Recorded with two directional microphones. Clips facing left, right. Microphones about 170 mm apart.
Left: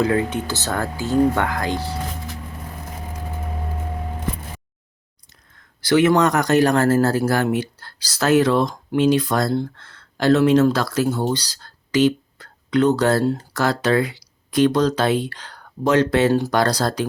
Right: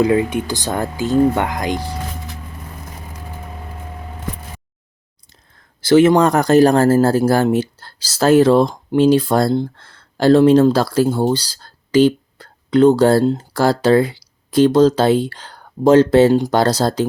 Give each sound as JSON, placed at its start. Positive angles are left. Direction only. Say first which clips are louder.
{"t": 0.0, "sound": "speech", "louder": "right 4 dB", "side_deg": -15}
{"t": 5.8, "sound": "speech", "louder": "right 5 dB", "side_deg": -25}